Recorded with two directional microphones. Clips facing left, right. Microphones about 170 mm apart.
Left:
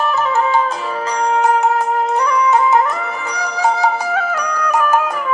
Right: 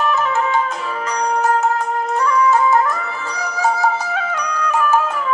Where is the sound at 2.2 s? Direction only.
20° left (ahead or behind).